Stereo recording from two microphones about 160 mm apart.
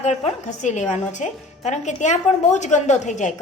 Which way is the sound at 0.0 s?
45° left (ahead or behind).